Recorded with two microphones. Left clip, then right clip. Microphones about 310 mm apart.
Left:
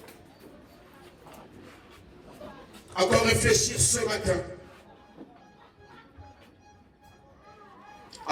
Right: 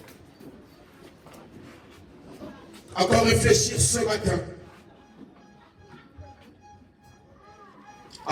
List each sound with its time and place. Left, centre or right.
3.0 s a man's voice: centre